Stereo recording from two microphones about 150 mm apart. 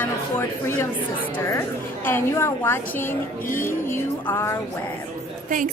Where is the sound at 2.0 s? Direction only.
15° left (ahead or behind).